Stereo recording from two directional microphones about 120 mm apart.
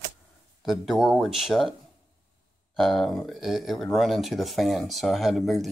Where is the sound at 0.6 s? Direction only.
Centre (ahead or behind).